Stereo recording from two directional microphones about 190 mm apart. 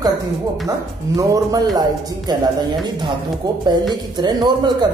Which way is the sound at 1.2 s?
20° right (ahead or behind).